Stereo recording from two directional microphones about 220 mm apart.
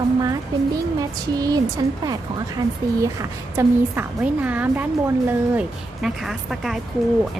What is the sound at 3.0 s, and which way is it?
A woman's voice, 15° right (ahead or behind).